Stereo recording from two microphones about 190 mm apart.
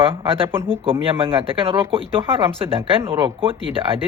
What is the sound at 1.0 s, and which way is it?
Speech, 30° right (ahead or behind).